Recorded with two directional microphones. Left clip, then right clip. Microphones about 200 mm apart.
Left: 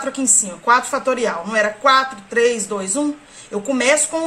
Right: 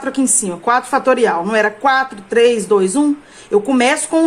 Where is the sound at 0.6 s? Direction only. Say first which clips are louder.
Right 2 dB; 45° right (ahead or behind).